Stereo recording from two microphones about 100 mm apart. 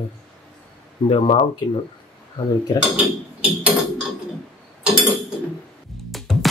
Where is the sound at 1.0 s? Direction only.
90° left.